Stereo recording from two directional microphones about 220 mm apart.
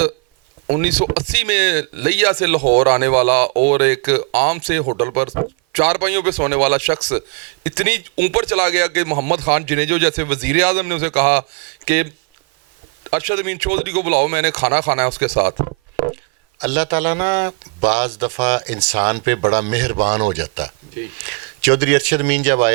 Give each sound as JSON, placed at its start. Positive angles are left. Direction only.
{"t": 0.8, "sound": "speech", "side_deg": -10}
{"t": 2.6, "sound": "speech", "side_deg": -35}
{"t": 2.8, "sound": "speech", "side_deg": -10}
{"t": 13.1, "sound": "speech", "side_deg": -10}
{"t": 15.6, "sound": "a sound", "side_deg": -30}
{"t": 16.6, "sound": "speech", "side_deg": -10}